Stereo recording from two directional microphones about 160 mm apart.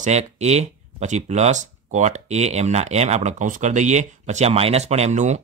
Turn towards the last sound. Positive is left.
turn(degrees=-45)  # may be behind; listen again after turning